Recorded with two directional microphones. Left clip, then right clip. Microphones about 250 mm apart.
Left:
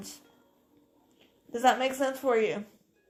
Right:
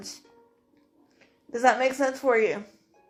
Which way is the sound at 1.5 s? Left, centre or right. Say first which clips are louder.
Right 3 dB; left.